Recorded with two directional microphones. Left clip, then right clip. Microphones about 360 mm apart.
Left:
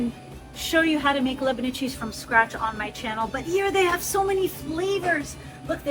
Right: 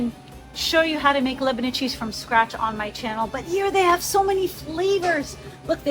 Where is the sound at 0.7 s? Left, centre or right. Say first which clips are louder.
Right 2 dB; right.